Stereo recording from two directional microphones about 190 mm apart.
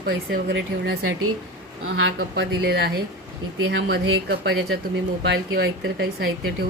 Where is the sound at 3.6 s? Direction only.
75° right (ahead or behind); by 6.7 s 55° right (ahead or behind).